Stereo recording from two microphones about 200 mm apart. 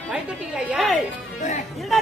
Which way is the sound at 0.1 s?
5° right (ahead or behind).